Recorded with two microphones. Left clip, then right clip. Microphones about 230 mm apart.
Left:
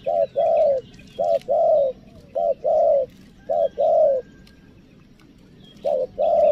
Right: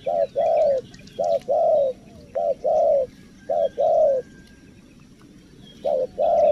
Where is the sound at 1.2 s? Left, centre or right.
Centre.